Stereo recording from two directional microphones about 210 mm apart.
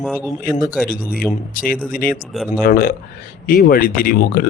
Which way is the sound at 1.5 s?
40° left (ahead or behind).